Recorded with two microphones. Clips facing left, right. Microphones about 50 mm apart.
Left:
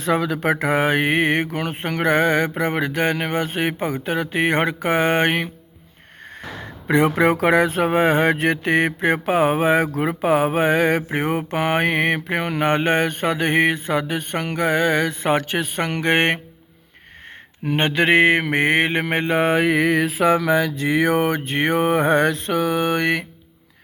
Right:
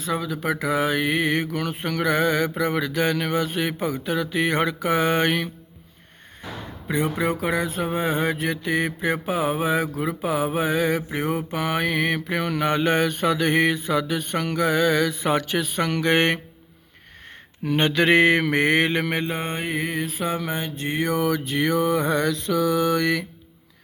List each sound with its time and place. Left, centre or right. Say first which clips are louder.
0.0 s speech: left 6 dB; left
6.8 s speech: left 7 dB; left
17.7 s speech: left 1 dB; left
19.1 s mantra: left 8 dB; left
21.2 s speech: left 2 dB; left